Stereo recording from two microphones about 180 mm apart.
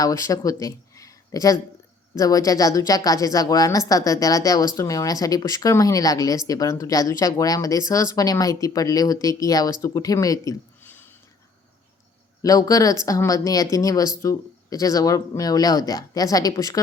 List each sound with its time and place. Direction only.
0.0 s a woman's voice: 20° left (ahead or behind)
12.4 s a woman's voice: 20° left (ahead or behind)